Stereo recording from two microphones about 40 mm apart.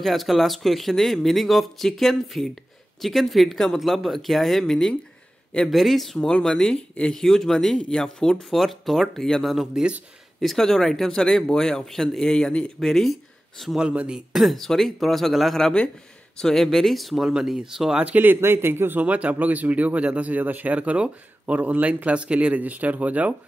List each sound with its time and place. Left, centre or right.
0.0 s speech: centre
6.1 s speech: left
8.5 s speech: centre
9.4 s speech: centre
10.4 s speech: centre
13.7 s a man's voice: right
14.4 s speech: centre
16.3 s speech: centre
16.6 s speech: centre
17.6 s speech: centre
18.2 s a man's voice: right
18.9 s a man's voice: right
22.6 s a man's voice: right